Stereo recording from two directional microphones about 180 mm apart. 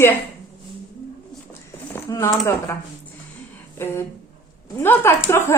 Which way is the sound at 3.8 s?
15° left (ahead or behind).